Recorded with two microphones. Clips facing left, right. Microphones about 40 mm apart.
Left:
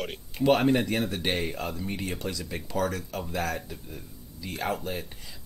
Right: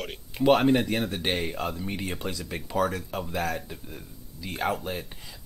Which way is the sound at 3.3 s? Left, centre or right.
Centre.